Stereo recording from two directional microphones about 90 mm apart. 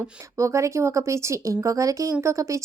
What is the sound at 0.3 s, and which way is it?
A woman's voice, 35° right (ahead or behind).